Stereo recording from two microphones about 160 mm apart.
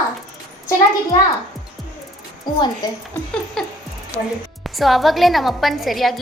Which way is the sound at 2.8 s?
25° left (ahead or behind).